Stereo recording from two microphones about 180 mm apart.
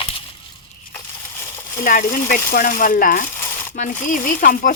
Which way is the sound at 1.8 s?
50° left (ahead or behind).